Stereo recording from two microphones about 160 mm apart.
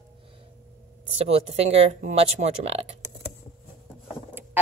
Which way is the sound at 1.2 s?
40° right (ahead or behind).